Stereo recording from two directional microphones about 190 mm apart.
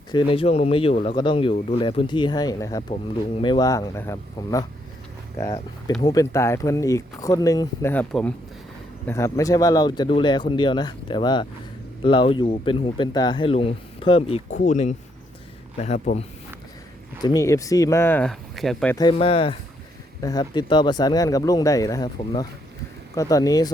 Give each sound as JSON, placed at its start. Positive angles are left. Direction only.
{"t": 0.1, "sound": "speech", "side_deg": 25}
{"t": 6.0, "sound": "speech", "side_deg": 20}
{"t": 9.0, "sound": "speech", "side_deg": 15}
{"t": 17.2, "sound": "speech", "side_deg": 15}
{"t": 18.9, "sound": "speech", "side_deg": 25}